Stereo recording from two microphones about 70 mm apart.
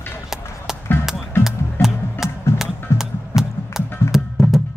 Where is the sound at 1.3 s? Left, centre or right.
Left.